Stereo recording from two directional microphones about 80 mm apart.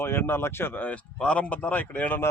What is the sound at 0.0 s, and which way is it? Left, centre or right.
Speech, left.